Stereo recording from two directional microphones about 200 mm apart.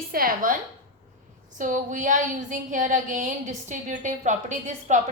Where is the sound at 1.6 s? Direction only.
40° right (ahead or behind).